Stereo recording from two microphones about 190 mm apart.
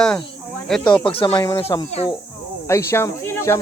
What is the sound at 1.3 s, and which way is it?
Speech, 15° left (ahead or behind).